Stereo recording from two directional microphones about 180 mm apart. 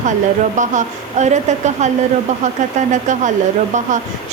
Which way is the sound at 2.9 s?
45° right (ahead or behind).